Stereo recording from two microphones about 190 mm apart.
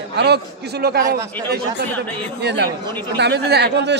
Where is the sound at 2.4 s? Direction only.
60° right (ahead or behind).